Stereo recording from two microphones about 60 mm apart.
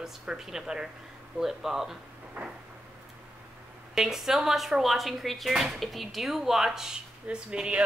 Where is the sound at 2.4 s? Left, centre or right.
Right.